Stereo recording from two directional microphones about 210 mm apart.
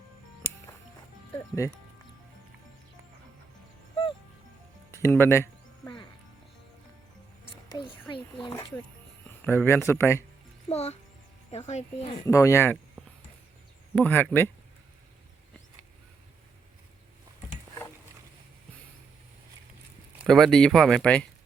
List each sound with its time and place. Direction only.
4.9 s music: 15° left (ahead or behind)
7.7 s speech: 25° left (ahead or behind)
10.7 s speech: 30° left (ahead or behind)
12.2 s speech: 15° left (ahead or behind)
13.9 s speech: 10° left (ahead or behind)
20.1 s speech: centre (ahead or behind)